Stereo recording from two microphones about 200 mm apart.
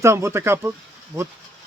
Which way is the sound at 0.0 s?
15° right (ahead or behind).